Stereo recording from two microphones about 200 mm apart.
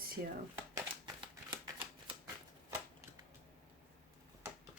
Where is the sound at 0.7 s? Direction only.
25° right (ahead or behind).